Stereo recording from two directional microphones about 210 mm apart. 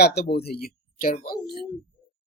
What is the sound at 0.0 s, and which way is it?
Speech, 50° left (ahead or behind).